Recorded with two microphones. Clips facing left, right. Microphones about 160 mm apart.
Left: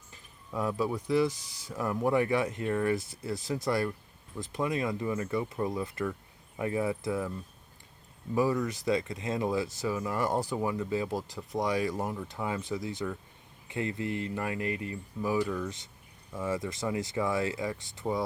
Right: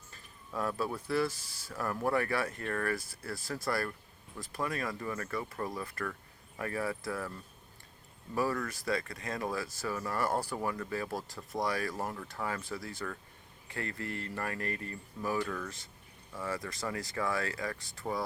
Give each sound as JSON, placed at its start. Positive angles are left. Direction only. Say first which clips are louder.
{"t": 0.1, "sound": "speech", "louder": "left 3 dB", "side_deg": 15}